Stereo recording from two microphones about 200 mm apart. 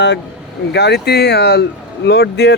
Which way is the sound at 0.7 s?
55° left (ahead or behind).